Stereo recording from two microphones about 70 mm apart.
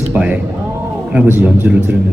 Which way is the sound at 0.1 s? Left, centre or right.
Right.